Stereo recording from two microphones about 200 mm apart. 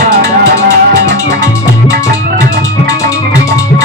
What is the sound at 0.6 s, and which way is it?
Music, 15° left (ahead or behind).